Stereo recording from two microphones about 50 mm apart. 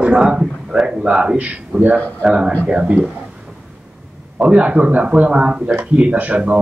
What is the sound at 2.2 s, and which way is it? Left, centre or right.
Speech, centre.